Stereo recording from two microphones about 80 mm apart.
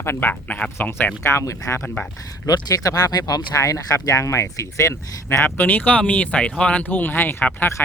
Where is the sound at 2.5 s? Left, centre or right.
Left.